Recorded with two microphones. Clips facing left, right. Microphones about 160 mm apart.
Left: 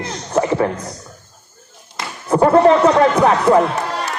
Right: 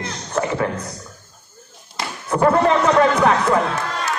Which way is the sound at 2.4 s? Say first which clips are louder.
Left 5 dB; 35° left (ahead or behind).